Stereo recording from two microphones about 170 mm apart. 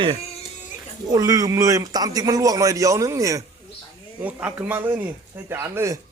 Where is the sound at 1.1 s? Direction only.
20° right (ahead or behind).